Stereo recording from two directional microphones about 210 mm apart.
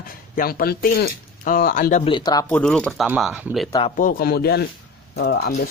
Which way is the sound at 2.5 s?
5° left (ahead or behind).